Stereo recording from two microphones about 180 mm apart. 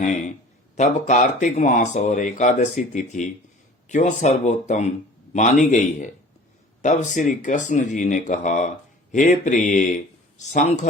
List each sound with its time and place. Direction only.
0.0 s a man's voice: 45° left (ahead or behind)
5.6 s speech: 45° left (ahead or behind)